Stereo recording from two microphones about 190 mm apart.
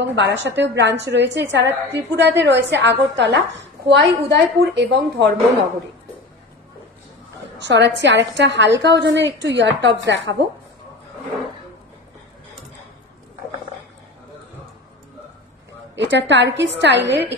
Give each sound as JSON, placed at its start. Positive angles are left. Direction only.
{"t": 0.0, "sound": "a woman's voice", "side_deg": -65}
{"t": 7.6, "sound": "a woman's voice", "side_deg": -65}
{"t": 16.0, "sound": "a woman's voice", "side_deg": -70}